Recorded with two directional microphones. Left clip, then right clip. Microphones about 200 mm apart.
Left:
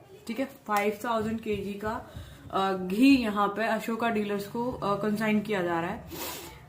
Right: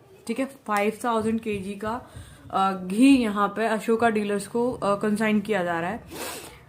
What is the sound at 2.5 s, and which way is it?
Speech, 30° right (ahead or behind).